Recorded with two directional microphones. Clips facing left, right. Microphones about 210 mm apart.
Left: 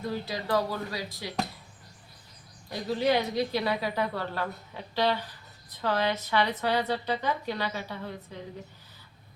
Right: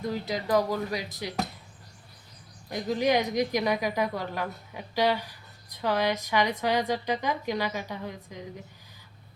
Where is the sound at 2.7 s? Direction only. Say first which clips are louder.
Right 1 dB; 15° right (ahead or behind).